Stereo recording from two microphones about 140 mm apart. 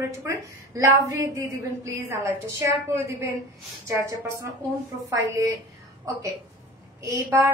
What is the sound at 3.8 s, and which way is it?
A woman's voice, 20° right (ahead or behind).